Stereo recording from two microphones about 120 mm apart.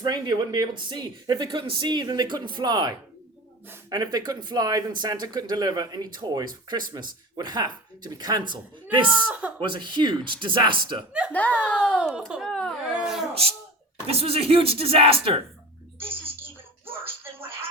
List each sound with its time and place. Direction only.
0.0 s speech: 40° right (ahead or behind)
9.0 s speech: 10° right (ahead or behind)
9.6 s speech: 40° right (ahead or behind)
11.3 s speech: 15° left (ahead or behind)
12.3 s crying: centre (ahead or behind)
14.1 s speech: 55° right (ahead or behind)
16.0 s a sound: 20° right (ahead or behind)